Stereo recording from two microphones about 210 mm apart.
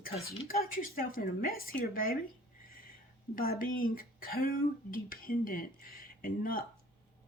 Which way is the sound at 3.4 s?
45° left (ahead or behind).